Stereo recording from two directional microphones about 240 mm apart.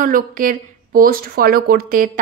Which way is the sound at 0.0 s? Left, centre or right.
Right.